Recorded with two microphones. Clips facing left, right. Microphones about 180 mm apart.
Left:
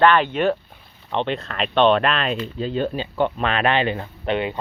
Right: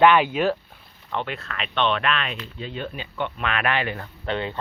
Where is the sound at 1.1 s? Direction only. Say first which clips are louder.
Left 6 dB; 25° left (ahead or behind).